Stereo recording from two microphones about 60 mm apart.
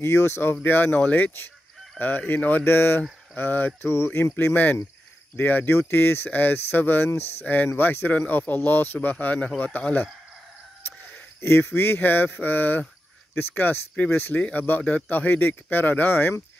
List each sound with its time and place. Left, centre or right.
0.0 s speech: left
11.1 s speech: left
14.8 s speech: centre
15.0 s speech: left